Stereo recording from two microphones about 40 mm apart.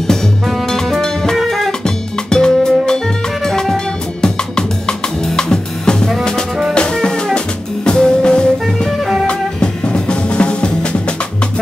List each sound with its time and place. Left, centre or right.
2.2 s music: centre
9.0 s music: centre
9.3 s music: left